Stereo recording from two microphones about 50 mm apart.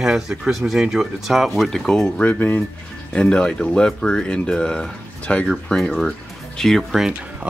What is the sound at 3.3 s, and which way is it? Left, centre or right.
Speech, centre.